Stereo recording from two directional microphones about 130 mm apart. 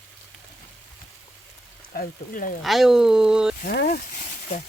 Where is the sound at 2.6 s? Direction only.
Centre (ahead or behind).